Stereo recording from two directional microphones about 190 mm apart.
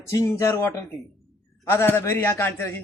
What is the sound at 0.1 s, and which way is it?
A man's voice, 15° left (ahead or behind).